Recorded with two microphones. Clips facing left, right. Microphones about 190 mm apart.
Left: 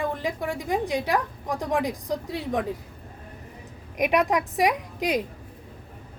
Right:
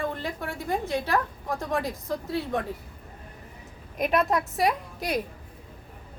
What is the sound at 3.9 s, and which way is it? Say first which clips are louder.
A woman's voice: left 2 dB; 15° left (ahead or behind).